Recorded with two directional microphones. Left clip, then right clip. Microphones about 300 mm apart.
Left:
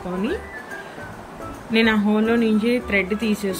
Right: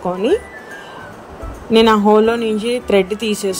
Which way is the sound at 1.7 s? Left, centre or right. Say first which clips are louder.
Right 9 dB; centre.